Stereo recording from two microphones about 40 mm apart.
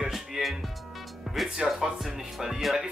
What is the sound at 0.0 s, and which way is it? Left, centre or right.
Music, centre.